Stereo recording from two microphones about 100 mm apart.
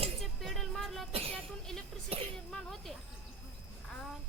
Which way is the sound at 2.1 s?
90° right.